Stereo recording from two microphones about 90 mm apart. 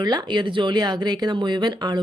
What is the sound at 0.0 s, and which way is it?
Speech, 55° right (ahead or behind).